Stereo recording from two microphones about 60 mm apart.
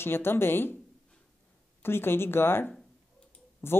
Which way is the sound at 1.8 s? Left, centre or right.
Left.